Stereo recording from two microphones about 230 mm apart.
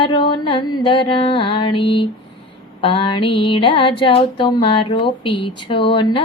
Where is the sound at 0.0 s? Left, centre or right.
Left.